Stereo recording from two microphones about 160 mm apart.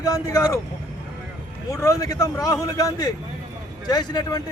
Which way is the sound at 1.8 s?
20° left (ahead or behind).